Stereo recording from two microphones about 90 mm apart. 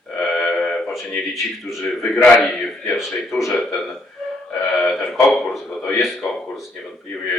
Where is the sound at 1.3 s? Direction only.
Centre (ahead or behind).